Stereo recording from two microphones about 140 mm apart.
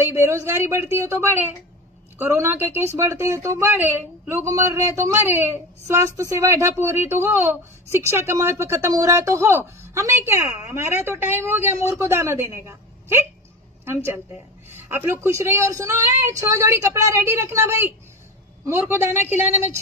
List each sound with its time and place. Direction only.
0.0 s a woman's voice: 20° right (ahead or behind)